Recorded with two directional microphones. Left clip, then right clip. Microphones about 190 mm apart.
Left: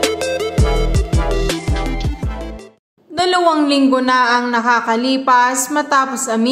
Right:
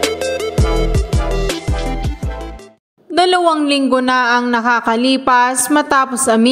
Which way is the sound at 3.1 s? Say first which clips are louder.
Right 2 dB; 40° right (ahead or behind).